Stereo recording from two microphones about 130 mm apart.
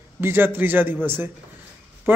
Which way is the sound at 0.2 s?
15° right (ahead or behind).